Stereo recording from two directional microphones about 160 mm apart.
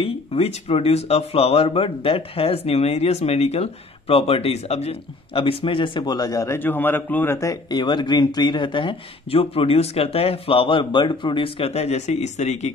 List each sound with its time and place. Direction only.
0.0 s speech: 35° left (ahead or behind)